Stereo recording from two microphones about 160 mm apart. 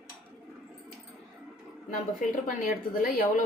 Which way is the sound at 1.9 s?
55° left (ahead or behind).